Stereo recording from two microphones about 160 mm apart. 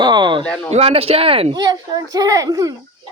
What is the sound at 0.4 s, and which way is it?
Speech, 5° left (ahead or behind).